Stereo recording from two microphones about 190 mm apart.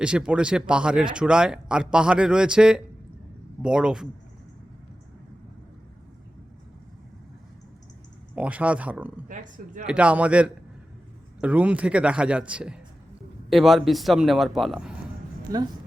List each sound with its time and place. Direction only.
0.0 s speech: 5° right (ahead or behind)
8.4 s speech: 5° right (ahead or behind)
9.3 s speech: 40° right (ahead or behind)
9.8 s speech: 5° right (ahead or behind)